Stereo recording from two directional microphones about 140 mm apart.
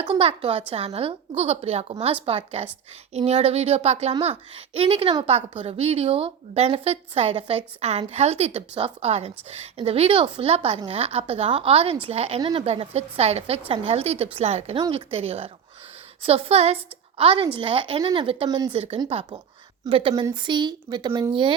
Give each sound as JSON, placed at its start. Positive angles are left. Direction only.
{"t": 0.0, "sound": "a woman's voice", "side_deg": -40}
{"t": 18.4, "sound": "speech", "side_deg": -30}
{"t": 18.7, "sound": "a woman's voice", "side_deg": -45}
{"t": 18.9, "sound": "a woman's voice", "side_deg": -30}